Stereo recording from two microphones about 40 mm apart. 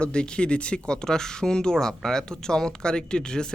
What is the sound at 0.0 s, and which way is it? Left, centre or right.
Speech, left.